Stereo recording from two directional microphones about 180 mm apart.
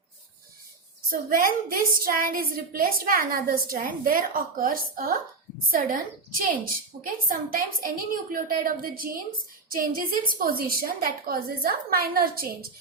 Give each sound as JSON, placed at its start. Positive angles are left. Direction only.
{"t": 1.1, "sound": "a woman's voice", "side_deg": -55}